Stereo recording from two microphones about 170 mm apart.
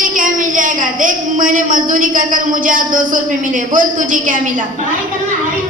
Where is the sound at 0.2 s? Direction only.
50° right (ahead or behind).